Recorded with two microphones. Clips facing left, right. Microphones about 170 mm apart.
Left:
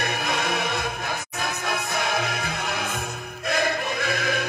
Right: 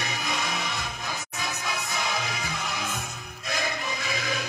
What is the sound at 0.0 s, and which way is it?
Music, 60° left (ahead or behind).